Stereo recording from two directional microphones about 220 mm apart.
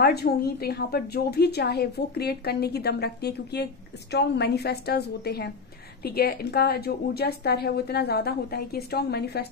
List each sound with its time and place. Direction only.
0.0 s a woman's voice: 45° left (ahead or behind)